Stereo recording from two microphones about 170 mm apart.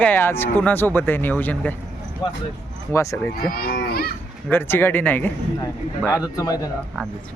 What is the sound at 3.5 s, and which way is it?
Speech, 60° left (ahead or behind).